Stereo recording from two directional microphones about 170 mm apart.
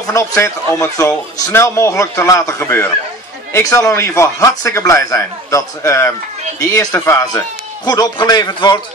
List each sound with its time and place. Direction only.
0.0 s a man's voice: 20° left (ahead or behind)